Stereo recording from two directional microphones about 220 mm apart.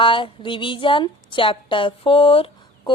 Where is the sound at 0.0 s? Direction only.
20° left (ahead or behind).